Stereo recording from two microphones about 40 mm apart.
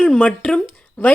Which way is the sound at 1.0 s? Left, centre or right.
Left.